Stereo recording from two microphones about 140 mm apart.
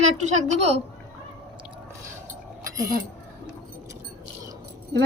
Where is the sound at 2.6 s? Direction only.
25° right (ahead or behind).